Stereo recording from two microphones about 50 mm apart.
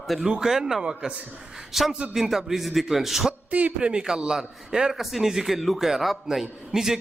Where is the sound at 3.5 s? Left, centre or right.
Right.